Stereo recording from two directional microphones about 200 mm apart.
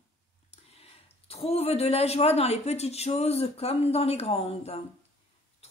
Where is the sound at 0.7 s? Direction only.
30° left (ahead or behind).